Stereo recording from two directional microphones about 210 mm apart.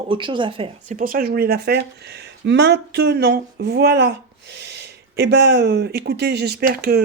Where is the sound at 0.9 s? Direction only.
40° right (ahead or behind).